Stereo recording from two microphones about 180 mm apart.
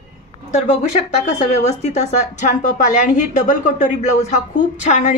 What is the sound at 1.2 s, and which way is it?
A woman's voice, 40° left (ahead or behind).